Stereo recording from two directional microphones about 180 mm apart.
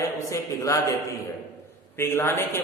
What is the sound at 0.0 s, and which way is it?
A man's voice, 15° left (ahead or behind).